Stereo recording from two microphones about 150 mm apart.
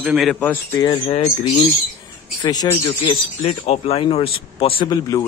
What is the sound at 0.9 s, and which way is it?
Speech, 40° left (ahead or behind).